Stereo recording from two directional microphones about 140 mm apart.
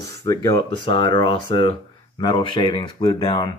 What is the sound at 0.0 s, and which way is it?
Speech, 25° left (ahead or behind).